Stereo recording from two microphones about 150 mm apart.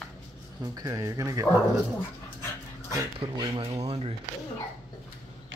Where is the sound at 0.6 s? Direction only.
25° right (ahead or behind).